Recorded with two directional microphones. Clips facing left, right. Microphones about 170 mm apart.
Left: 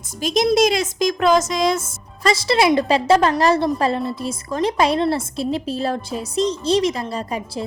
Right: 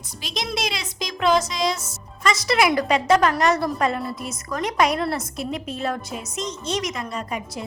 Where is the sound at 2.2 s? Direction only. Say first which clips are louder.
Left 4 dB; 30° left (ahead or behind).